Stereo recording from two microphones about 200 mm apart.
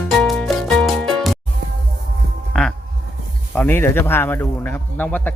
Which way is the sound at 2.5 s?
5° left (ahead or behind).